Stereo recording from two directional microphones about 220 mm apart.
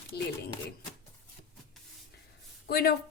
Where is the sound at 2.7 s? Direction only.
45° left (ahead or behind).